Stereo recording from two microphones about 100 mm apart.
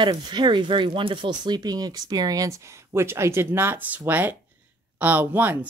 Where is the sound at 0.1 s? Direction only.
45° right (ahead or behind).